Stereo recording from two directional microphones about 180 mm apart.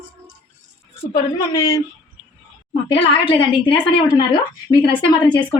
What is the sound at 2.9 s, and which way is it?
A woman's voice, 30° left (ahead or behind).